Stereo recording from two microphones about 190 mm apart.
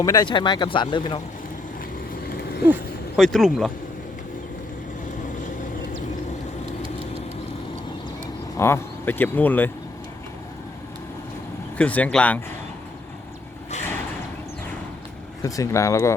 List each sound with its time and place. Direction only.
0.0 s speech: 20° left (ahead or behind)
2.3 s a sound: 55° left (ahead or behind)
3.2 s speech: centre (ahead or behind)
8.5 s speech: 15° left (ahead or behind)
11.8 s speech: 5° left (ahead or behind)
15.4 s speech: 15° left (ahead or behind)